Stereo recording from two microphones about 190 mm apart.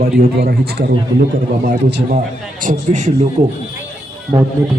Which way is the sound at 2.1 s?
40° right (ahead or behind).